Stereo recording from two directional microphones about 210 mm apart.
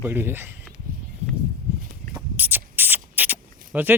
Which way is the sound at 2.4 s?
10° right (ahead or behind).